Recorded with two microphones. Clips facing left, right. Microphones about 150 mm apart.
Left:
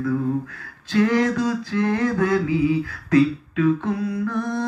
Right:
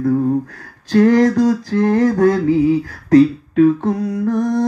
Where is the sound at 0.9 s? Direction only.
45° right (ahead or behind).